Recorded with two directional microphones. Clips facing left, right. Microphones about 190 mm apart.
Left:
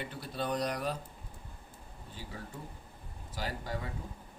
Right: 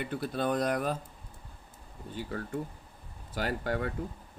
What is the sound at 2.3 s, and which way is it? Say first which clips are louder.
Speech: right 10 dB; 60° right (ahead or behind).